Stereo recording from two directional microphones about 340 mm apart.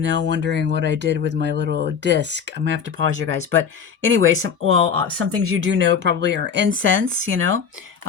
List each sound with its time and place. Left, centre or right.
0.0 s speech: right